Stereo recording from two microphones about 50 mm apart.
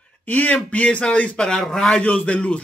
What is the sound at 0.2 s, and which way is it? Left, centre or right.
Speech, left.